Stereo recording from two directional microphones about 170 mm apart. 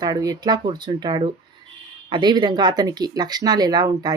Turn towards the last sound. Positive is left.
turn(degrees=-25)  # may be behind; listen again after turning